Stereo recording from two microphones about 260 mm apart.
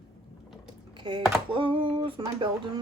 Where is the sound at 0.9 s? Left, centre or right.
Centre.